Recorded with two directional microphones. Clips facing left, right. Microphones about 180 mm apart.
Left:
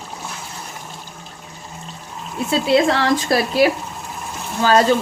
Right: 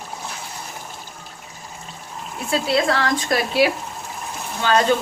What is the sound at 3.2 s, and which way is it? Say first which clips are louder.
Speech: left 1 dB; 35° left (ahead or behind).